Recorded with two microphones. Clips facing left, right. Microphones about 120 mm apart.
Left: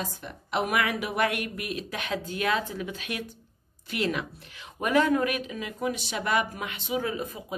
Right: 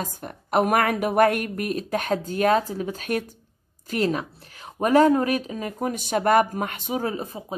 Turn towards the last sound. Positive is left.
turn(degrees=-35)  # may be behind; listen again after turning